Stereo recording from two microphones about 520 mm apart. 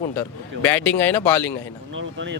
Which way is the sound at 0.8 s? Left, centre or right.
Left.